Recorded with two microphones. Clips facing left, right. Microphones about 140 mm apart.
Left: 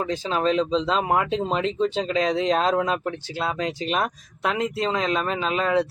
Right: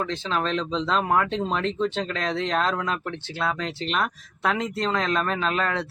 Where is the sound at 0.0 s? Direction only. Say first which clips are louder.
Left 3 dB; 10° left (ahead or behind).